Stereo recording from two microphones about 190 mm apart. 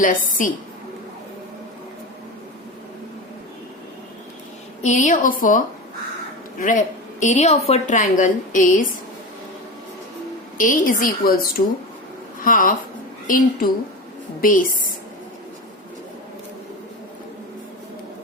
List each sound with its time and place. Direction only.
0.0 s a woman's voice: 45° left (ahead or behind)
4.8 s a woman's voice: 40° left (ahead or behind)
10.6 s a woman's voice: 45° left (ahead or behind)